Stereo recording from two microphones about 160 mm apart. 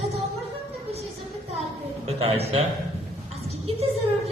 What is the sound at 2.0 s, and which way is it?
Speech, 40° right (ahead or behind).